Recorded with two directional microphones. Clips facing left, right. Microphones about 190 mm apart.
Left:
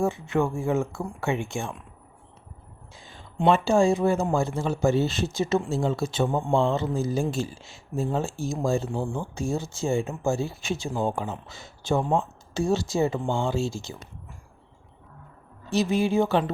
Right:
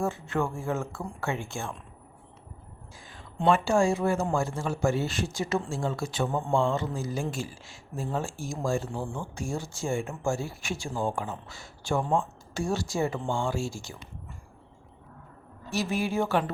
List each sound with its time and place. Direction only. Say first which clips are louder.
0.0 s speech: left 4 dB; 15° left (ahead or behind)
3.0 s speech: left 4 dB; 25° left (ahead or behind)
15.7 s speech: left 6 dB; 20° left (ahead or behind)